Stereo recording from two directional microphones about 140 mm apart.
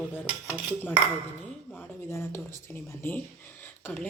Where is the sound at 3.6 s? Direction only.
10° left (ahead or behind).